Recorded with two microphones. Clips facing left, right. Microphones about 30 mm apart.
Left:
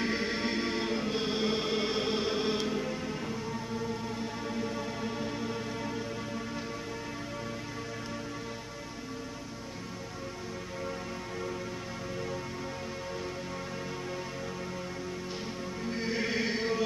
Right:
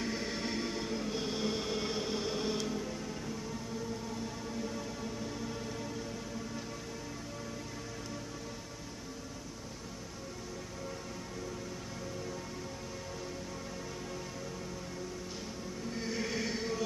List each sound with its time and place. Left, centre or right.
0.0 s music: left
15.8 s music: left